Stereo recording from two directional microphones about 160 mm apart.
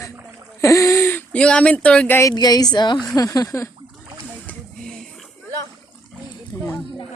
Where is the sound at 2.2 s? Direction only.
25° left (ahead or behind).